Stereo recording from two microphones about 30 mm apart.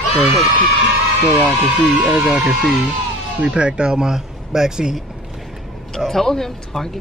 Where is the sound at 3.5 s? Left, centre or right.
Right.